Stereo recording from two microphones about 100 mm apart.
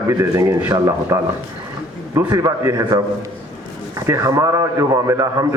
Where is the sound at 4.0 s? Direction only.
30° right (ahead or behind).